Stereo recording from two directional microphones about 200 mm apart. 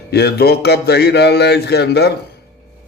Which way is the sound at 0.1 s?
55° left (ahead or behind).